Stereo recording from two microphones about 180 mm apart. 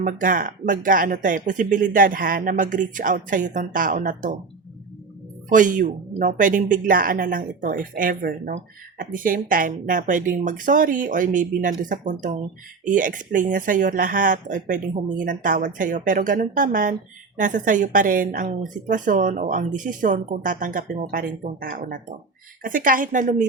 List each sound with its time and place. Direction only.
0.0 s speech: 50° right (ahead or behind)
5.5 s speech: 45° right (ahead or behind)